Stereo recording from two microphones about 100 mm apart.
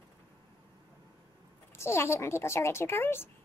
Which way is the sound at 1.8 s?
25° left (ahead or behind).